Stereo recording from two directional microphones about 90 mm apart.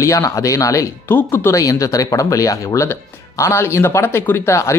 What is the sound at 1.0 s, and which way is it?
Speech, 25° left (ahead or behind).